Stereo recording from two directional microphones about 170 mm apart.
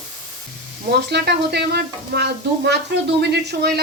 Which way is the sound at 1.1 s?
75° right (ahead or behind).